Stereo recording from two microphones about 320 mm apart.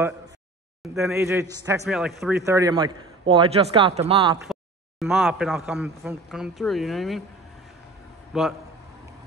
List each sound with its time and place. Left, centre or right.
0.9 s a man's voice: centre
4.5 s speech: centre
8.3 s a man's voice: centre